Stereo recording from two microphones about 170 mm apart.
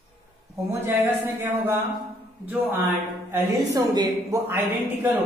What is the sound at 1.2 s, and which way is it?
Speech, 10° right (ahead or behind).